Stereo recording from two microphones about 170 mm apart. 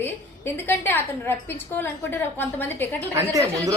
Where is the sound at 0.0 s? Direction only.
15° left (ahead or behind).